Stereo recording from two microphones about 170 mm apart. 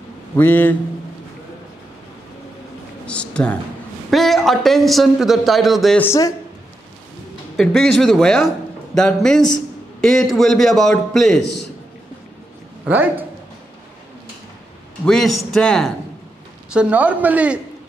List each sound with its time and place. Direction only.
0.4 s a man's voice: 10° left (ahead or behind)
3.1 s a man's voice: 5° left (ahead or behind)
5.9 s a man's voice: 15° left (ahead or behind)
7.5 s a man's voice: centre (ahead or behind)
12.8 s a man's voice: 10° right (ahead or behind)
15.0 s a man's voice: centre (ahead or behind)
16.7 s speech: 10° right (ahead or behind)